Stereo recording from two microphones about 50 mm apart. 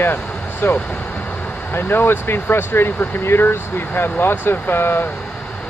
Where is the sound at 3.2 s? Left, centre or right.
Left.